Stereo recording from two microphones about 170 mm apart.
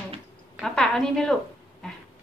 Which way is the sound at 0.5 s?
5° left (ahead or behind).